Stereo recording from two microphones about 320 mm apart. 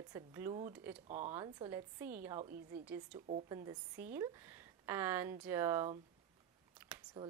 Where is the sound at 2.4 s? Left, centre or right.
Right.